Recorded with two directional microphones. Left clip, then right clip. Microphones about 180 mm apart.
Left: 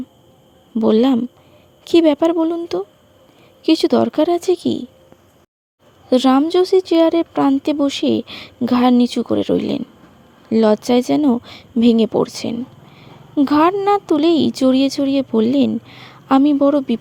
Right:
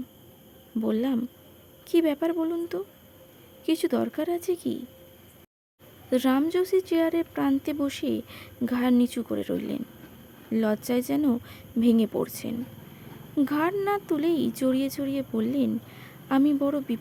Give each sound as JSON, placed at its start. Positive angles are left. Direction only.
{"t": 0.8, "sound": "speech", "side_deg": 35}
{"t": 3.7, "sound": "speech", "side_deg": 30}
{"t": 6.1, "sound": "speech", "side_deg": 30}